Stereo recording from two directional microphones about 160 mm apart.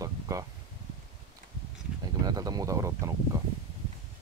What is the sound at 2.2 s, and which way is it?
Speech, 25° right (ahead or behind).